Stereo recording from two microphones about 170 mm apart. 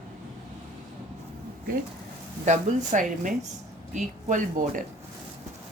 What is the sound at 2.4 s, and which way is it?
A woman's voice, 45° right (ahead or behind).